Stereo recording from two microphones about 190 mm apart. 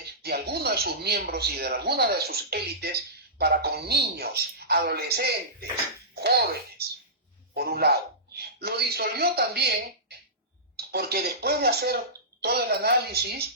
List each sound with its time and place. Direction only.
0.2 s speech: 55° right (ahead or behind)